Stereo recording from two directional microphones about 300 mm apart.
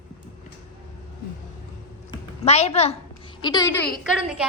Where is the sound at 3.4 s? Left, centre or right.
Centre.